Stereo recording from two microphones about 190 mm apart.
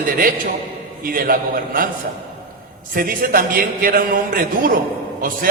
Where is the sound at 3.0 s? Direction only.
50° right (ahead or behind).